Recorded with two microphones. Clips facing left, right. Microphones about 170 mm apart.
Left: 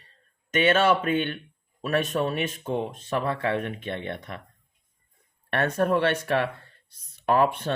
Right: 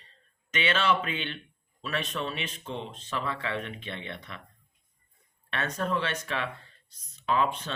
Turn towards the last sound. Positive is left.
turn(degrees=60)  # may be behind; listen again after turning